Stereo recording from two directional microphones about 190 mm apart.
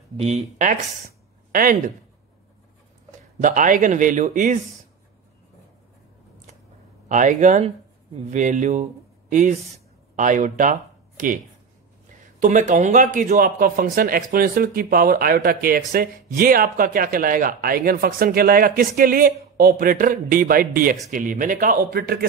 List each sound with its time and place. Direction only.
0.2 s speech: 35° right (ahead or behind)
3.3 s a man's voice: 45° right (ahead or behind)
7.1 s a man's voice: 40° right (ahead or behind)